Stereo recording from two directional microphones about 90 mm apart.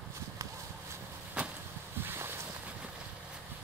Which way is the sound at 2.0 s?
25° right (ahead or behind).